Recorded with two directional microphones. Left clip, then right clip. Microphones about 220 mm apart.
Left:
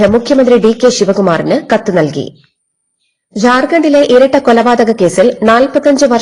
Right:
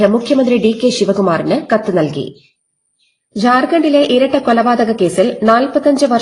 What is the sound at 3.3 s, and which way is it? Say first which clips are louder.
A woman's voice: left 3 dB; 30° left (ahead or behind).